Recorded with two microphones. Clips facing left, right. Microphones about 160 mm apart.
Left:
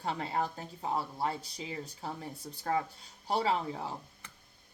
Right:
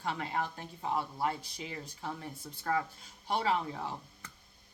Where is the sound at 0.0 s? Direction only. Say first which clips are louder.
Left 2 dB; 35° left (ahead or behind).